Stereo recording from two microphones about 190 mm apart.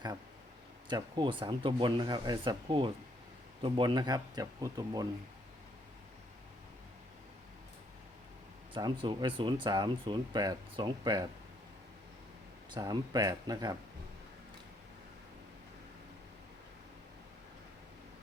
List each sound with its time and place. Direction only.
0.9 s speech: 20° right (ahead or behind)
8.7 s speech: 25° right (ahead or behind)
12.7 s speech: 20° right (ahead or behind)